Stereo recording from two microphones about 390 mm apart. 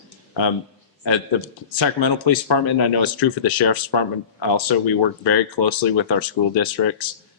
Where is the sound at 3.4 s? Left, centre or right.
Left.